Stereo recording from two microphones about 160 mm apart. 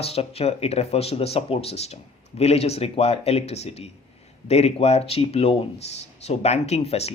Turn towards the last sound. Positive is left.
turn(degrees=40)  # may be behind; listen again after turning